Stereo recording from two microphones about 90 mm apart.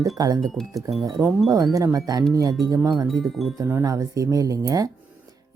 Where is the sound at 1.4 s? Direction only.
40° right (ahead or behind).